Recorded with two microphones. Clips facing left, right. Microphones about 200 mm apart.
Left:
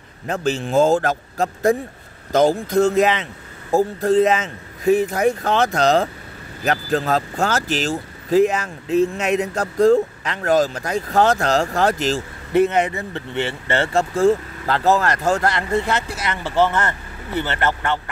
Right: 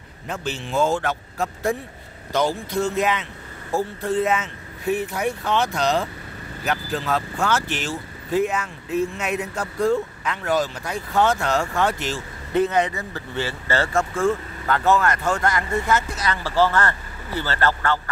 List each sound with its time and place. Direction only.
0.3 s a man's voice: 45° left (ahead or behind)
4.2 s speech: 85° left
4.8 s a man's voice: 45° left (ahead or behind)
8.4 s speech: 90° left
9.4 s speech: 40° left (ahead or behind)
12.5 s speech: 25° left (ahead or behind)
14.1 s speech: 40° left (ahead or behind); by 18.1 s 20° left (ahead or behind)